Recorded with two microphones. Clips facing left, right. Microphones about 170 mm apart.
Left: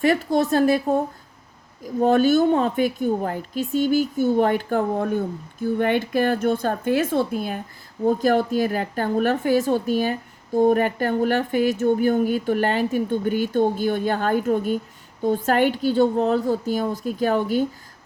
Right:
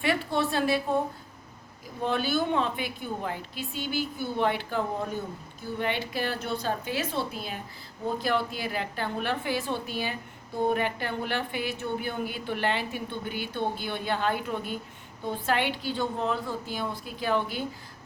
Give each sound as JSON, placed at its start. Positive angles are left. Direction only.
{"t": 0.0, "sound": "a woman's voice", "side_deg": 40}
{"t": 2.0, "sound": "a woman's voice", "side_deg": 45}